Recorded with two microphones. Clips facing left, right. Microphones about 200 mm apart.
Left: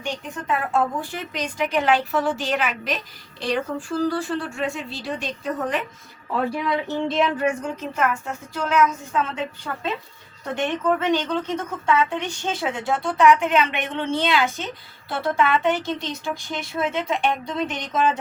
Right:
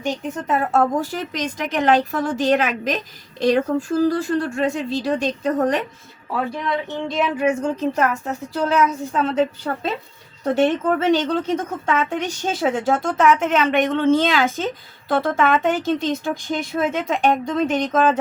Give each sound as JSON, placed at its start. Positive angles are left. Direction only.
{"t": 0.0, "sound": "speech", "side_deg": -40}
{"t": 6.5, "sound": "speech", "side_deg": 5}
{"t": 7.3, "sound": "speech", "side_deg": -20}